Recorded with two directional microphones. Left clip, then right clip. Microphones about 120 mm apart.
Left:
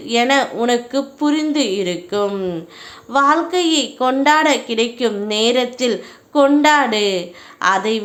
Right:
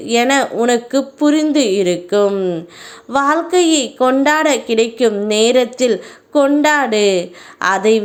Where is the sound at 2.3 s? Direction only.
20° right (ahead or behind).